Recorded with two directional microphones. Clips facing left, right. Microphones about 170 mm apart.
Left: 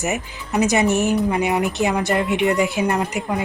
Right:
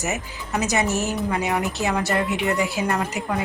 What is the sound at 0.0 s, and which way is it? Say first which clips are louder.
Speech: left 3 dB; 15° left (ahead or behind).